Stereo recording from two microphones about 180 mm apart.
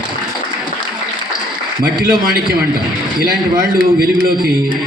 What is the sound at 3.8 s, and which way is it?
Speech, 60° right (ahead or behind).